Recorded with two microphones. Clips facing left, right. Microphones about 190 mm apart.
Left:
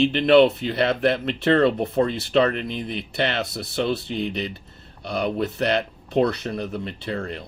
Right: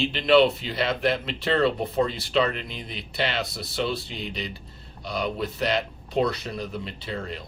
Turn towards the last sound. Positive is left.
turn(degrees=55)  # may be behind; listen again after turning